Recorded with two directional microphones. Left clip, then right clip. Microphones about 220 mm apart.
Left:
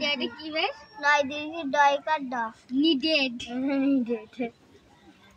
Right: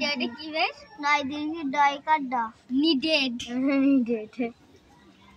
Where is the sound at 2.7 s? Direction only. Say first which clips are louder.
Even; 50° right (ahead or behind).